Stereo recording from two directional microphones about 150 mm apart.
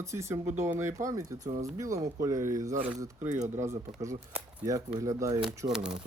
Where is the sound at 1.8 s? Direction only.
20° right (ahead or behind).